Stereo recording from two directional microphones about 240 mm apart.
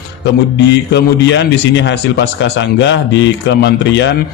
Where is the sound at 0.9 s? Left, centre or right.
Left.